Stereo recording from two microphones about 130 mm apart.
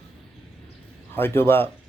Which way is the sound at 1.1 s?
15° left (ahead or behind).